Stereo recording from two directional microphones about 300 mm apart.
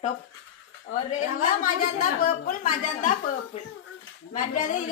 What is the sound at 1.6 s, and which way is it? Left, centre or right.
A woman's voice, left.